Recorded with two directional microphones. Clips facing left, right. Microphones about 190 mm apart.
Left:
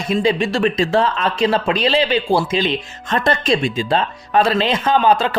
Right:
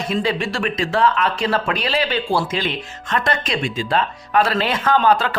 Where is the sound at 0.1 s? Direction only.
15° left (ahead or behind).